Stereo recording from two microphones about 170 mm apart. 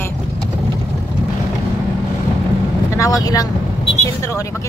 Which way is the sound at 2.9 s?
20° left (ahead or behind).